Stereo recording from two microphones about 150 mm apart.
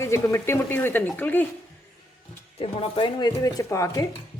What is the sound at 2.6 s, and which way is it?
Speech, 40° left (ahead or behind).